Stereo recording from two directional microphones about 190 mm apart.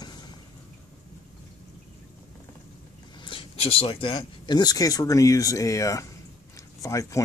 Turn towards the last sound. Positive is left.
turn(degrees=15)  # may be behind; listen again after turning